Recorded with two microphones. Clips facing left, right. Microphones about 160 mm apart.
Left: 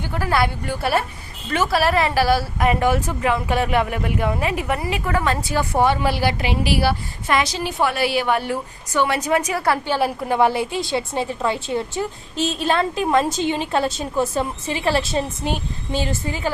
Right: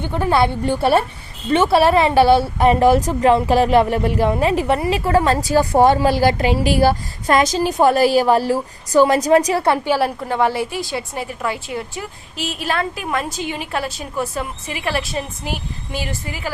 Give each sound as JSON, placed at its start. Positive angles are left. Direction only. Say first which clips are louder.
{"t": 0.0, "sound": "a woman's voice", "louder": "right 4 dB", "side_deg": -20}
{"t": 10.2, "sound": "a woman's voice", "louder": "left 1 dB", "side_deg": 15}